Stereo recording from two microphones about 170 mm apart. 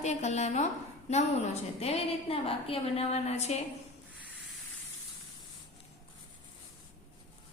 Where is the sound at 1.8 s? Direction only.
35° left (ahead or behind).